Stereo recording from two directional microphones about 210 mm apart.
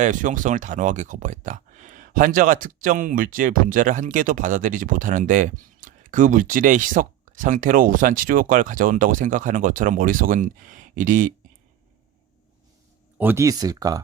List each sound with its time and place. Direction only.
0.0 s speech: 40° right (ahead or behind)
13.1 s speech: 10° right (ahead or behind)